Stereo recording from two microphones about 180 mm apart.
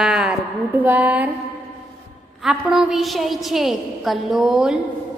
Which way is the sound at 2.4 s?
5° right (ahead or behind).